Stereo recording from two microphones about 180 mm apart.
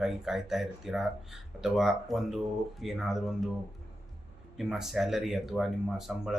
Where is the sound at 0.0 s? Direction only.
Centre (ahead or behind).